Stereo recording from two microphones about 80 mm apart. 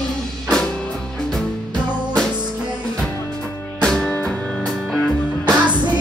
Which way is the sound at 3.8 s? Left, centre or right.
Centre.